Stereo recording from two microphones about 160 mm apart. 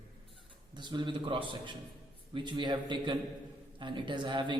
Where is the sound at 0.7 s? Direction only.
30° right (ahead or behind).